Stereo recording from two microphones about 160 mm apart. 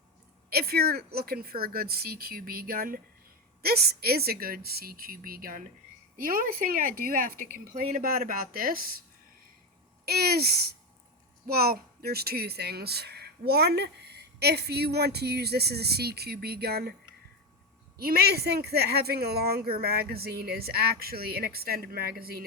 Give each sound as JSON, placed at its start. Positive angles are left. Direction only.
{"t": 0.5, "sound": "speech", "side_deg": -75}
{"t": 3.6, "sound": "speech", "side_deg": -75}
{"t": 10.1, "sound": "speech", "side_deg": -75}
{"t": 17.9, "sound": "speech", "side_deg": -75}